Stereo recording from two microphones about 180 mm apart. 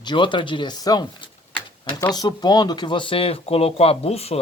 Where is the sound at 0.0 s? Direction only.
25° left (ahead or behind).